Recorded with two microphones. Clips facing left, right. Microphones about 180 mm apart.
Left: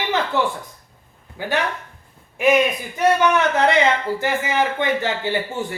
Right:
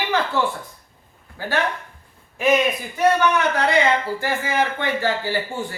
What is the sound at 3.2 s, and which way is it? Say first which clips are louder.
A woman's voice: left 2 dB; 20° left (ahead or behind).